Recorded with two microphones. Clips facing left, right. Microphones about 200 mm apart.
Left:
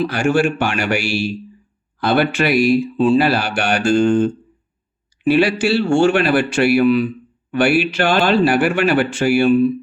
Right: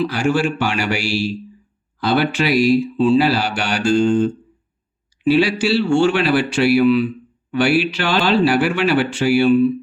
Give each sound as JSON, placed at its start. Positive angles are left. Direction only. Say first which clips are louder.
{"t": 0.0, "sound": "speech", "louder": "left 2 dB", "side_deg": 55}